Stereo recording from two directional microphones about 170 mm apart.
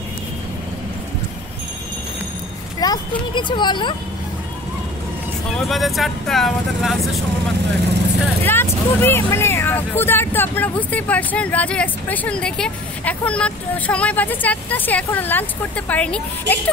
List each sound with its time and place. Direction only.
2.8 s speech: 25° left (ahead or behind)
5.7 s speech: centre (ahead or behind)
8.5 s speech: 15° left (ahead or behind)